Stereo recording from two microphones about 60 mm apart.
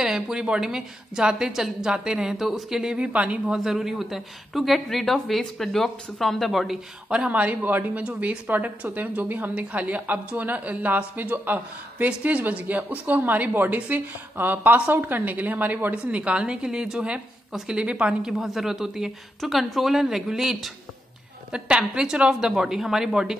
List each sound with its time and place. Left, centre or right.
0.0 s a woman's voice: centre
3.1 s a woman's voice: right
3.5 s a woman's voice: centre
7.1 s a woman's voice: right
15.9 s a woman's voice: right
18.4 s a woman's voice: centre